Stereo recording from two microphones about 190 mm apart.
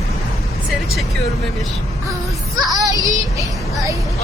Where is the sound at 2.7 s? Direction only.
20° right (ahead or behind).